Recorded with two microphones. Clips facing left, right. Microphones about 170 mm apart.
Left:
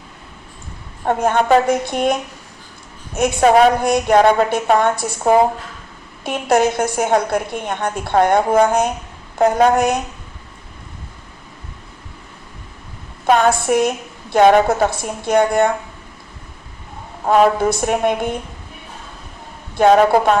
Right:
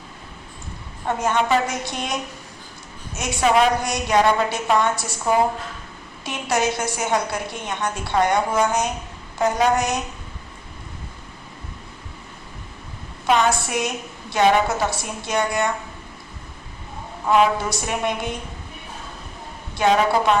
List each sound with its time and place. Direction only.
1.0 s a woman's voice: 55° left (ahead or behind)
3.2 s a woman's voice: 50° left (ahead or behind)
13.2 s a woman's voice: 50° left (ahead or behind)
17.2 s a woman's voice: 50° left (ahead or behind)
19.7 s a woman's voice: 50° left (ahead or behind)